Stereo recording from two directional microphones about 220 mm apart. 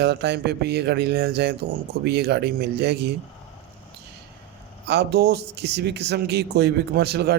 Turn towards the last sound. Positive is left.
turn(degrees=-45)  # may be behind; listen again after turning